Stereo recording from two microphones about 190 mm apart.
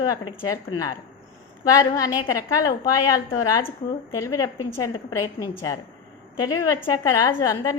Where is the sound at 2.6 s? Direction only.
20° left (ahead or behind).